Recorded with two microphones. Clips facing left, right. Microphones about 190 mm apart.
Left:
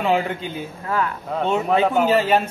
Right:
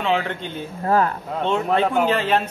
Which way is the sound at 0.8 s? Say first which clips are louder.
Right 5 dB; 40° right (ahead or behind).